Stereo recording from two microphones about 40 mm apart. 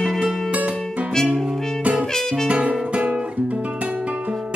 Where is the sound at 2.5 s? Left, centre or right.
Right.